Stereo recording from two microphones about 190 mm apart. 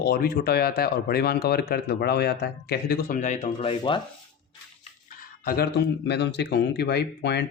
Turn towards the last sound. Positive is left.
turn(degrees=65)  # may be behind; listen again after turning